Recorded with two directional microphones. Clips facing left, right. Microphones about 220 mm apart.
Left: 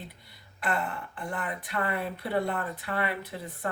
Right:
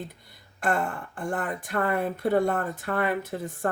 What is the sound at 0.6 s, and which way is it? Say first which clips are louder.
A woman's voice: right 4 dB; 45° right (ahead or behind).